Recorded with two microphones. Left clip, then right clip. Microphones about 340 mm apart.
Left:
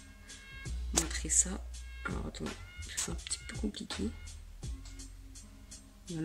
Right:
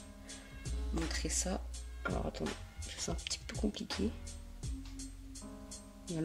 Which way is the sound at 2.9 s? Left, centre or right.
Centre.